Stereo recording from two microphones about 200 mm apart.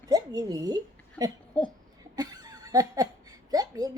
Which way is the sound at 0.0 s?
20° right (ahead or behind).